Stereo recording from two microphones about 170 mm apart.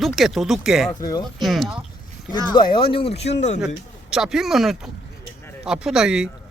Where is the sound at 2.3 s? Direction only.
25° left (ahead or behind).